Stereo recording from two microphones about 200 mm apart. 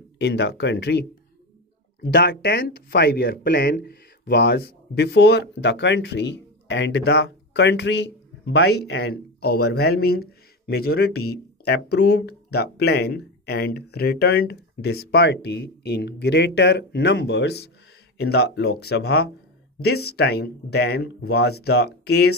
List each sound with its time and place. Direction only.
0.2 s speech: 60° left (ahead or behind)